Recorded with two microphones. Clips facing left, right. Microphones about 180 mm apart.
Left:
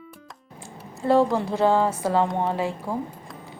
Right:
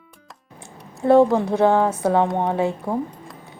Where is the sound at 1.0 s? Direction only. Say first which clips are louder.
Right 5 dB; 20° right (ahead or behind).